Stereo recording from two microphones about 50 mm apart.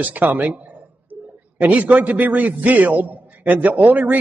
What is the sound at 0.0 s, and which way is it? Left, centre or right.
Speech, right.